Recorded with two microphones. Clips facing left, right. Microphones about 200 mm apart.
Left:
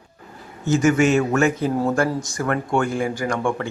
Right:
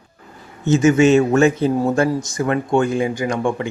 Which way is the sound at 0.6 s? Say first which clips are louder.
Right 4 dB; 25° right (ahead or behind).